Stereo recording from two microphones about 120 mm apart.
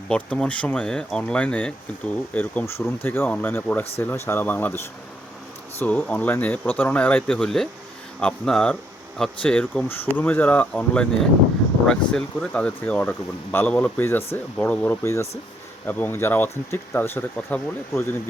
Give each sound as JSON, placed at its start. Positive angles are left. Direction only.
{"t": 0.1, "sound": "speech", "side_deg": 10}
{"t": 5.8, "sound": "speech", "side_deg": 15}
{"t": 7.3, "sound": "speech", "side_deg": 0}